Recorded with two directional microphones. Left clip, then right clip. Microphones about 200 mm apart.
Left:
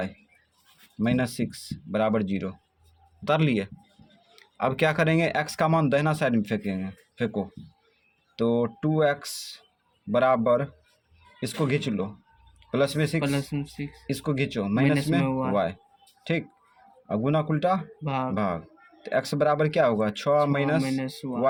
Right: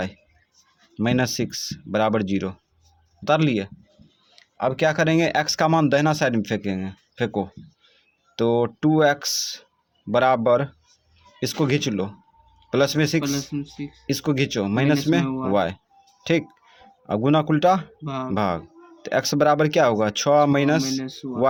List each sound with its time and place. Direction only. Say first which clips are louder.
0.9 s speech: right 4 dB; 30° right (ahead or behind)
13.2 s speech: right 2 dB; 30° left (ahead or behind)
14.1 s speech: right 5 dB; 30° right (ahead or behind)
15.3 s speech: right 1 dB; 30° left (ahead or behind)
15.5 s speech: right 4 dB; 30° right (ahead or behind)
18.0 s speech: even; 30° left (ahead or behind)
18.3 s speech: right 5 dB; 30° right (ahead or behind)
21.0 s speech: even; 30° left (ahead or behind)